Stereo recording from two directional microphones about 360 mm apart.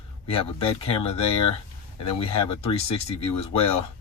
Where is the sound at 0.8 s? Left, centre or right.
Centre.